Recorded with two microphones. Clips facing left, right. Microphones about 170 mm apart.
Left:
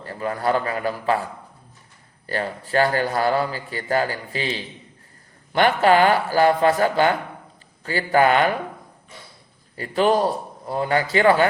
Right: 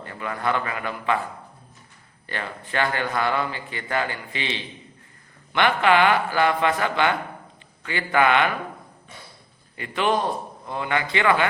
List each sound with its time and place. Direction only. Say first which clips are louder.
0.0 s a man's voice: left 4 dB; 40° left (ahead or behind)
2.2 s a man's voice: left 6 dB; 40° left (ahead or behind)
9.7 s a man's voice: left 4 dB; 40° left (ahead or behind)